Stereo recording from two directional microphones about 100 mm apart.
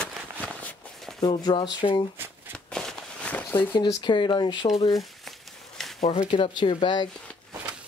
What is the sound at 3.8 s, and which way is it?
Speech, 50° left (ahead or behind).